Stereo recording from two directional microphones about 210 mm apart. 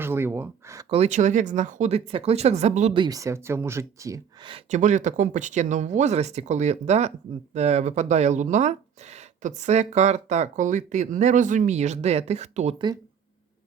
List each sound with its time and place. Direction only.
0.0 s a sound: 10° right (ahead or behind)
0.9 s speech: 30° right (ahead or behind); by 4.5 s 15° right (ahead or behind)
4.5 s speech: 35° right (ahead or behind)